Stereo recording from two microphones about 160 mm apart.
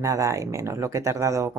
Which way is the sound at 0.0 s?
20° right (ahead or behind).